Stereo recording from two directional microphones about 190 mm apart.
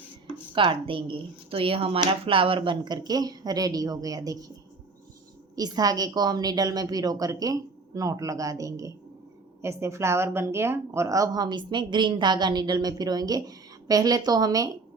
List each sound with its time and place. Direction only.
0.5 s a woman's voice: 25° right (ahead or behind)
5.5 s a woman's voice: 20° right (ahead or behind)